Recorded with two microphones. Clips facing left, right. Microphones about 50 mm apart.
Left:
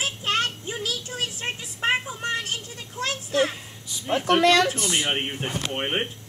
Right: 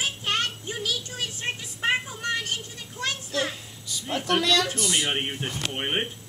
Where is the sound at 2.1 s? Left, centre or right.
Left.